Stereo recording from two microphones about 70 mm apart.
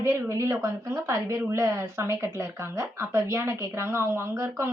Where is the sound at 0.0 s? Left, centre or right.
Right.